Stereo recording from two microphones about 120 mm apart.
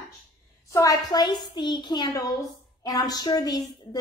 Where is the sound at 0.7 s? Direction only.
30° left (ahead or behind).